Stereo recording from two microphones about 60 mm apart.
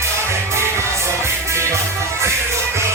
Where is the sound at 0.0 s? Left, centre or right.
Right.